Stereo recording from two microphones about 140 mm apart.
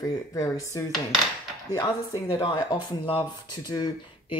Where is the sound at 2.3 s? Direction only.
30° left (ahead or behind).